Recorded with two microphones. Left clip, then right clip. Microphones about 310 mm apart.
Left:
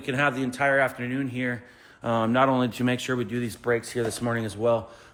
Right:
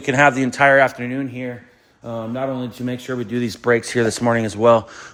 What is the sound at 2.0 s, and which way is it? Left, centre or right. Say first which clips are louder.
Speech: left 3 dB; left.